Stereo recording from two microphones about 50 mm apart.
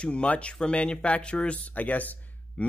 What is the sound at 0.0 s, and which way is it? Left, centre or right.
A man's voice, left.